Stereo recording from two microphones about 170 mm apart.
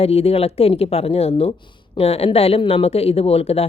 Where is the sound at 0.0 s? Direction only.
35° left (ahead or behind).